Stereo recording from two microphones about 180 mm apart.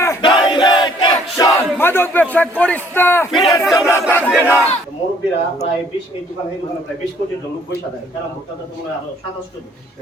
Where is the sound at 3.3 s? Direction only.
25° left (ahead or behind).